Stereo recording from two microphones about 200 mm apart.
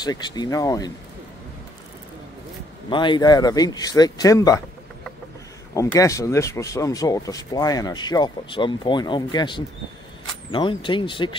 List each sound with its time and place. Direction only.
0.0 s speech: 20° left (ahead or behind)
2.9 s speech: 25° left (ahead or behind)
5.8 s speech: 15° left (ahead or behind)